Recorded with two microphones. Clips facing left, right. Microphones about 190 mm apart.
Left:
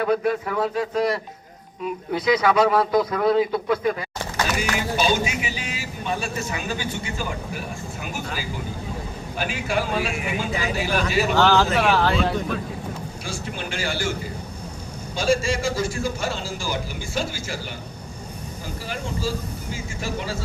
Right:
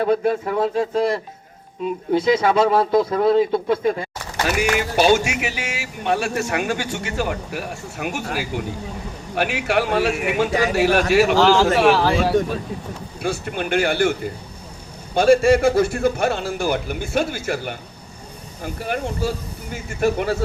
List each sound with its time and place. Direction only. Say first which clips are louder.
0.0 s a man's voice: right 3 dB; 30° right (ahead or behind)
4.5 s speech: right 7 dB; 70° right (ahead or behind)
11.7 s speech: right 4 dB; 5° right (ahead or behind)
13.2 s a man's voice: right 9 dB; 60° right (ahead or behind)